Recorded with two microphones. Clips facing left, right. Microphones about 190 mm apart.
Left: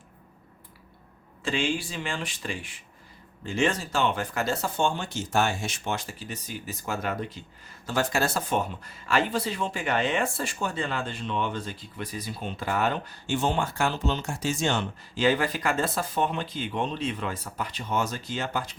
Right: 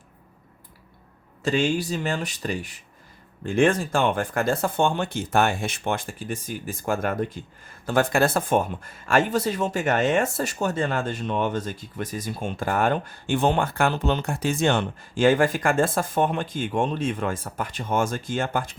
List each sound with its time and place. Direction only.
1.4 s speech: 40° right (ahead or behind)
3.4 s speech: 55° right (ahead or behind)